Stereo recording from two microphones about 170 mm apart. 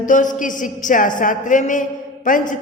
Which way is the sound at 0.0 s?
50° left (ahead or behind).